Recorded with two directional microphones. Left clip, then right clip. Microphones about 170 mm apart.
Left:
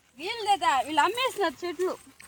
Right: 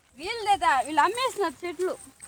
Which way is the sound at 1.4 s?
55° left (ahead or behind).